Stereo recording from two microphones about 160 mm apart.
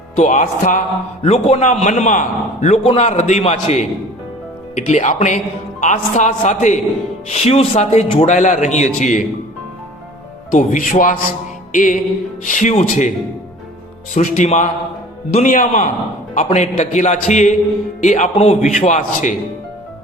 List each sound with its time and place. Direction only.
0.2 s a man's voice: 50° left (ahead or behind)
10.5 s speech: 55° left (ahead or behind)
11.7 s music: 55° left (ahead or behind)
12.5 s a man's voice: 55° left (ahead or behind)